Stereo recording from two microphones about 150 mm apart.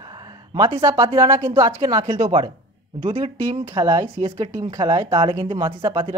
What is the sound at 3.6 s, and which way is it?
Speech, 20° right (ahead or behind).